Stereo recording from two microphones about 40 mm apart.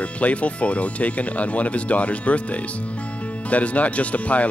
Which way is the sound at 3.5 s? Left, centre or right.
Left.